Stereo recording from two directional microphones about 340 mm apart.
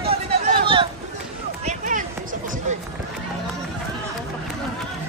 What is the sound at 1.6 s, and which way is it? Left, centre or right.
Run, right.